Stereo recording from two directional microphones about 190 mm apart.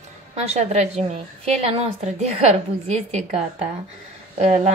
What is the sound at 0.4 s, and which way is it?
Speech, 35° right (ahead or behind).